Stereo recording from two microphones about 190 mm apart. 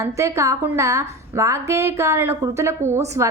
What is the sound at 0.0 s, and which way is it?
A woman's voice, 15° right (ahead or behind).